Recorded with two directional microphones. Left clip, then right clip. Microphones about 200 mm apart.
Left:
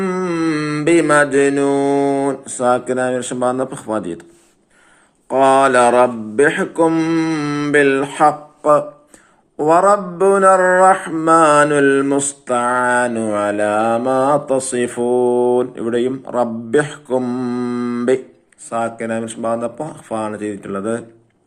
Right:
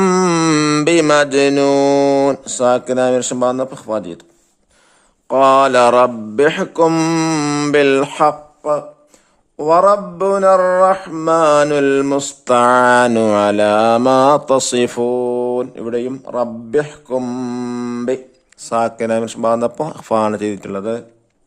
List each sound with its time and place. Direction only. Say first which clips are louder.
0.0 s mantra: right 5 dB; 55° right (ahead or behind); by 3.6 s 35° right (ahead or behind)
3.6 s speech: right 1 dB; 25° right (ahead or behind)
5.3 s speech: right 1 dB; 40° right (ahead or behind)
9.6 s a man's voice: right 1 dB; 15° right (ahead or behind)
10.2 s mantra: left 2 dB; 30° right (ahead or behind)
10.4 s speech: right 1 dB; 20° right (ahead or behind)
10.8 s mantra: left 1 dB; 30° right (ahead or behind)
12.5 s speech: right 6 dB; 60° right (ahead or behind); by 14.0 s 40° right (ahead or behind)
14.2 s mantra: right 2 dB; 35° right (ahead or behind)
14.4 s speech: right 4 dB; 50° right (ahead or behind)
14.8 s speech: left 1 dB; 35° right (ahead or behind)
16.9 s mantra: left 1 dB; 30° right (ahead or behind)
18.7 s speech: right 4 dB; 55° right (ahead or behind)
20.7 s mantra: even; 35° right (ahead or behind)